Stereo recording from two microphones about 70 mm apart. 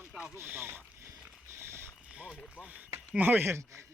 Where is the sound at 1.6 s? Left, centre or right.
Right.